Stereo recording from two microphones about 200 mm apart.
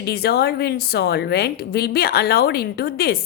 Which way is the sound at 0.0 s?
50° left (ahead or behind).